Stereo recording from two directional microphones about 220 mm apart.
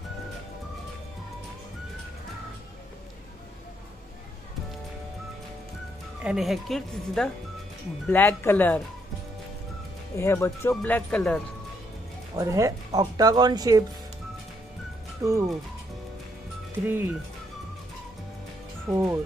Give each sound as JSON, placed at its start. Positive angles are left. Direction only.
{"t": 6.2, "sound": "speech", "side_deg": 0}
{"t": 10.1, "sound": "speech", "side_deg": 10}
{"t": 12.4, "sound": "speech", "side_deg": -15}
{"t": 15.2, "sound": "speech", "side_deg": -15}
{"t": 16.8, "sound": "speech", "side_deg": -10}
{"t": 18.9, "sound": "speech", "side_deg": -15}